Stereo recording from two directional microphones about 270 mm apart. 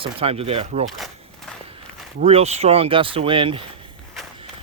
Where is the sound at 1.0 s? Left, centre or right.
Centre.